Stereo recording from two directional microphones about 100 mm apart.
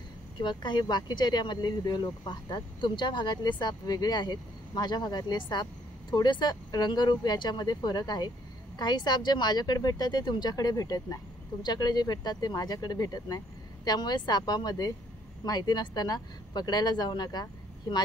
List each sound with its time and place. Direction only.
0.4 s speech: 50° left (ahead or behind)